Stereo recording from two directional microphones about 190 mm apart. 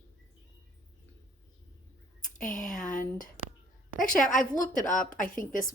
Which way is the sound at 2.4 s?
45° left (ahead or behind).